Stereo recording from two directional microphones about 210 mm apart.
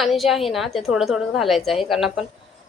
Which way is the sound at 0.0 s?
Centre (ahead or behind).